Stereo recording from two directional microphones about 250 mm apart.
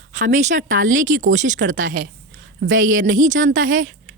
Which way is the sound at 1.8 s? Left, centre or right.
Right.